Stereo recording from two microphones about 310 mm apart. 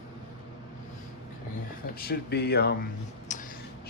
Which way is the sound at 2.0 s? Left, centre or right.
Left.